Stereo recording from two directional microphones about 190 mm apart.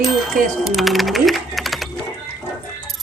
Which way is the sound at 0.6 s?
Centre (ahead or behind).